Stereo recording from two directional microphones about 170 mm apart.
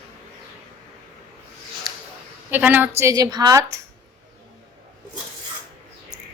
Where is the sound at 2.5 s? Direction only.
10° right (ahead or behind).